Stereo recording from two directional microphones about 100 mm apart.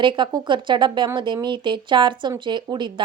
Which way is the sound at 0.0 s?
50° right (ahead or behind).